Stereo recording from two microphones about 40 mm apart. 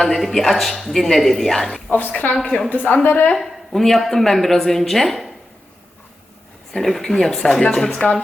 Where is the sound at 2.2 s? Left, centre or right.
Left.